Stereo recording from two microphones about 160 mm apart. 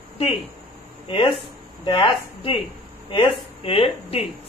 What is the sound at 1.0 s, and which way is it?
A woman's voice, 35° left (ahead or behind).